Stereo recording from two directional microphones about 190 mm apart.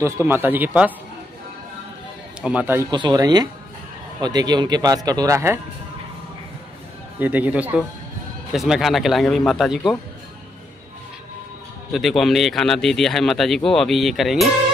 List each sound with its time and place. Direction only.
0.0 s speech: 10° right (ahead or behind)
2.4 s speech: 10° right (ahead or behind)
2.9 s a man's voice: 25° right (ahead or behind)
7.2 s a man's voice: 10° right (ahead or behind)
11.9 s a man's voice: centre (ahead or behind)